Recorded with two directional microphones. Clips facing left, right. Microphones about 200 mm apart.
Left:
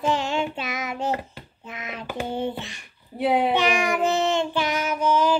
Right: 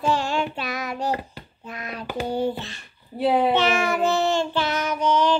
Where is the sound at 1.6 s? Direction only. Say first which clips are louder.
Right 1 dB; 20° left (ahead or behind).